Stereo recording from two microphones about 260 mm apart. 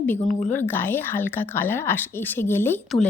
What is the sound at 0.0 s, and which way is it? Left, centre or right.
Speech, centre.